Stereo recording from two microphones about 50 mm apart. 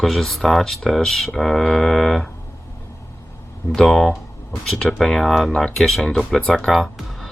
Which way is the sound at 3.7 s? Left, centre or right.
Centre.